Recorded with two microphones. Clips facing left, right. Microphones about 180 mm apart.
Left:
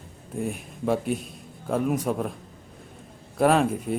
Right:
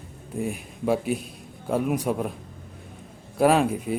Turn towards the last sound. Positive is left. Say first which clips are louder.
# right 1 dB
turn(degrees=0)  # may be behind; listen again after turning